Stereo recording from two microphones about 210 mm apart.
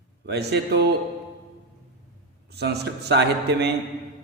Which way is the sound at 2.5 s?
50° right (ahead or behind).